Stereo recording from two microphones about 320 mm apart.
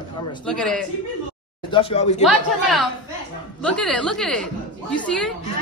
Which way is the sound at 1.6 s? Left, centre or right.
Centre.